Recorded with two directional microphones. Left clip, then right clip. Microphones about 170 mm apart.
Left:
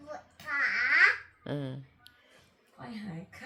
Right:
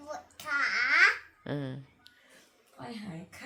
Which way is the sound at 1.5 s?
5° right (ahead or behind).